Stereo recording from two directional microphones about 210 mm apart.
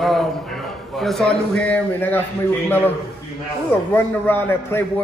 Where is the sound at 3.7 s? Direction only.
10° left (ahead or behind).